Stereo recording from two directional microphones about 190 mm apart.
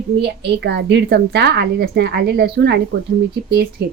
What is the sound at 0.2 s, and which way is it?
A woman's voice, 60° right (ahead or behind).